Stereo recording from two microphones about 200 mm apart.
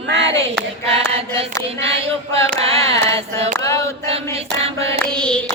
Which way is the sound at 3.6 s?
15° left (ahead or behind).